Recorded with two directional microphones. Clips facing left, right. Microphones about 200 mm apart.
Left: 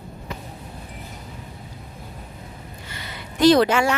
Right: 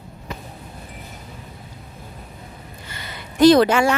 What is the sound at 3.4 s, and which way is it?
Speech, 50° right (ahead or behind).